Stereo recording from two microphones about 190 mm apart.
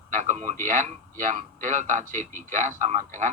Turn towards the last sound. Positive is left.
turn(degrees=-40)  # may be behind; listen again after turning